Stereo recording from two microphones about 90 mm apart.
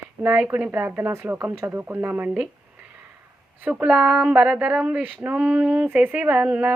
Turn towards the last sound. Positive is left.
turn(degrees=-15)  # may be behind; listen again after turning